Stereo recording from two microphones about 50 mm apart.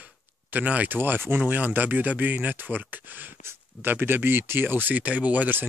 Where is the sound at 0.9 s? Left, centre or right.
Right.